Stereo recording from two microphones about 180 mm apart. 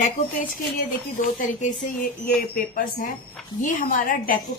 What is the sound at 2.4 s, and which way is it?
A woman's voice, 55° left (ahead or behind).